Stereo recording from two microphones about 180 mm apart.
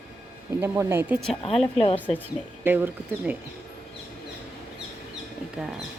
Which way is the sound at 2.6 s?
10° right (ahead or behind).